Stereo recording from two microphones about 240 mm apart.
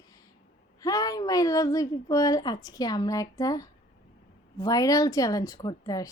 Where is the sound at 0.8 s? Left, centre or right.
Centre.